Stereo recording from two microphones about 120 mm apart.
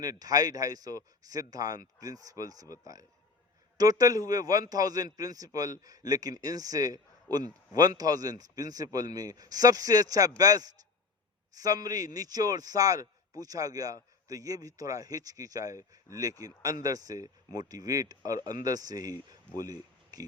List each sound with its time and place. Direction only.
0.0 s a man's voice: 30° right (ahead or behind)